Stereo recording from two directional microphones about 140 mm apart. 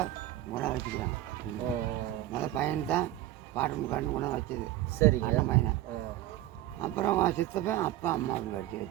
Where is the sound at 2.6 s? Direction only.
10° left (ahead or behind).